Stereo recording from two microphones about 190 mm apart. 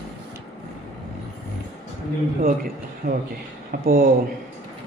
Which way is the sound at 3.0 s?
50° right (ahead or behind).